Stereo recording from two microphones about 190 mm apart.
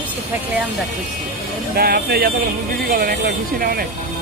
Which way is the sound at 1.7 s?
55° right (ahead or behind).